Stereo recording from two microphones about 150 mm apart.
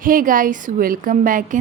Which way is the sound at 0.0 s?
65° right (ahead or behind).